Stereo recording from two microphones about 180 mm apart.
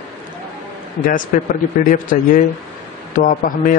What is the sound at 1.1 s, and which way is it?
Speech, 50° left (ahead or behind).